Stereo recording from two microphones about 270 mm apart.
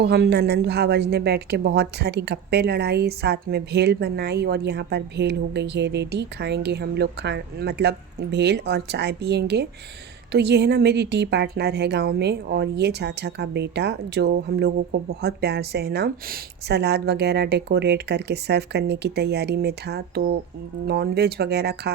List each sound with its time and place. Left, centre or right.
0.0 s a woman's voice: right